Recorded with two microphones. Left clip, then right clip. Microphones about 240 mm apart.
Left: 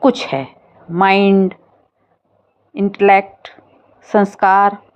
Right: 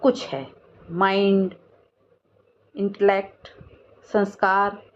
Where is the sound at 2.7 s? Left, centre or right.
Left.